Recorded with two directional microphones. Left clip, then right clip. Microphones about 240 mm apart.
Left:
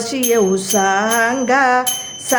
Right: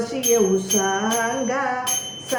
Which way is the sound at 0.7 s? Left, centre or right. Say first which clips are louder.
Left 7 dB; left.